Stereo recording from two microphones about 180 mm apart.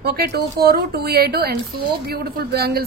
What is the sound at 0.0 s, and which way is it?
A woman's voice, 60° right (ahead or behind).